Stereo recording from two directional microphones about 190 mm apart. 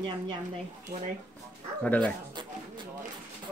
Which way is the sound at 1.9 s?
5° left (ahead or behind).